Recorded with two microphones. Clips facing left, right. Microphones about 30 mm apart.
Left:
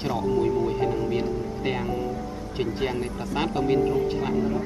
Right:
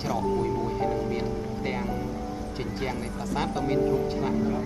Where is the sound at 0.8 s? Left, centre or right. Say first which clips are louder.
Left 2 dB; left.